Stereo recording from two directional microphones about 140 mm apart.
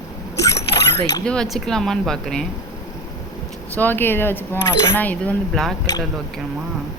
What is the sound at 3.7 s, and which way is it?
Speech, 15° left (ahead or behind).